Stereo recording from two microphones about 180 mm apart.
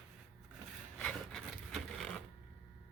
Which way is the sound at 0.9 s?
5° left (ahead or behind).